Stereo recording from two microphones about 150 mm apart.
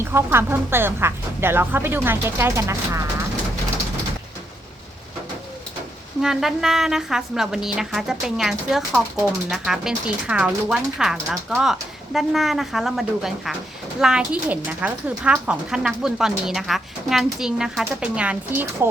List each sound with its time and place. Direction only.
0.0 s speech: 15° right (ahead or behind)
6.2 s speech: centre (ahead or behind)